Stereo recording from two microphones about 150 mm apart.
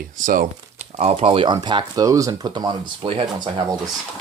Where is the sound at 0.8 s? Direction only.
45° right (ahead or behind).